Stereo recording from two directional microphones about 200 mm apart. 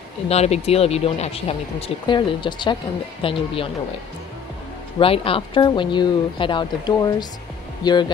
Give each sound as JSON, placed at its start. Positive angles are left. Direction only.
{"t": 0.3, "sound": "speech", "side_deg": 30}
{"t": 4.9, "sound": "speech", "side_deg": 25}